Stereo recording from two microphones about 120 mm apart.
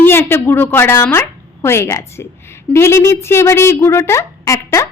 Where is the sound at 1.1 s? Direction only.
20° left (ahead or behind).